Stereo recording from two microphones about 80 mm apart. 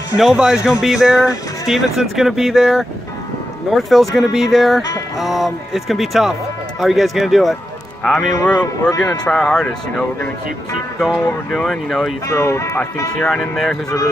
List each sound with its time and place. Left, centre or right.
0.2 s a man's voice: centre
11.5 s speech: centre
12.3 s speech: left
13.1 s speech: centre